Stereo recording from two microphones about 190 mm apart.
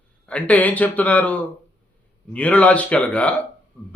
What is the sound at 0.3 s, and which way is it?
Speech, 5° left (ahead or behind).